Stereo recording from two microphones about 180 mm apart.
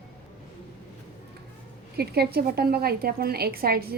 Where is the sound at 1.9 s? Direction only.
60° right (ahead or behind).